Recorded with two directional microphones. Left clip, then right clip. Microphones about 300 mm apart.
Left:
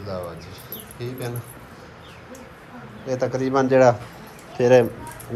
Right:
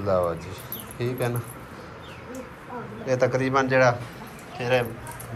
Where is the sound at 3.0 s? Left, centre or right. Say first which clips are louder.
Right 1 dB; centre.